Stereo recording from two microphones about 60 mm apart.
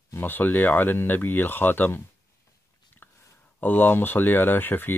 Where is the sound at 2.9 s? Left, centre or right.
Left.